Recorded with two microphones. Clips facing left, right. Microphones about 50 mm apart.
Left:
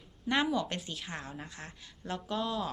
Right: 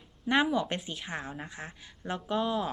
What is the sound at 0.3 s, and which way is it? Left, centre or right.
A woman's voice, centre.